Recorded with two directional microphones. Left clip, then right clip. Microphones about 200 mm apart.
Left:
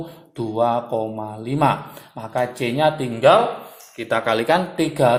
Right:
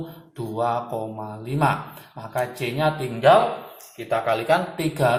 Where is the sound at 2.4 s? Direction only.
50° left (ahead or behind).